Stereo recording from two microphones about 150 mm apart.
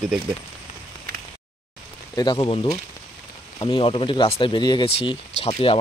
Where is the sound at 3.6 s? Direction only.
35° left (ahead or behind).